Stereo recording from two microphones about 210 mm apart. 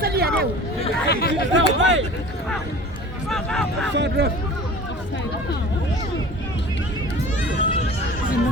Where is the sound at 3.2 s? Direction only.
Centre (ahead or behind).